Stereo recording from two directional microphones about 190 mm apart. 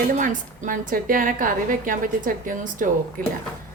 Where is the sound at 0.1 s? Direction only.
45° right (ahead or behind).